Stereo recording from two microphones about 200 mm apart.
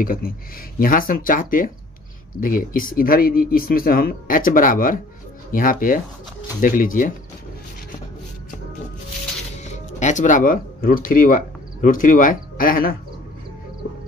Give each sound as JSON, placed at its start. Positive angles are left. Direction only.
{"t": 0.0, "sound": "speech", "side_deg": 45}
{"t": 9.7, "sound": "speech", "side_deg": 35}